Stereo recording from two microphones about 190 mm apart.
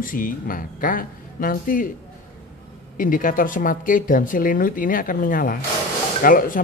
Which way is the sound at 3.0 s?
45° left (ahead or behind).